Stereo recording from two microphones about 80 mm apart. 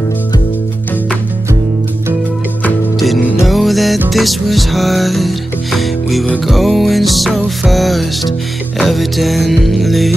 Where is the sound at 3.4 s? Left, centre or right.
Centre.